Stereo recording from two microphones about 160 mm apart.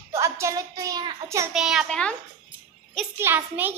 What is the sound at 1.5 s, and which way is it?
Speech, 5° right (ahead or behind).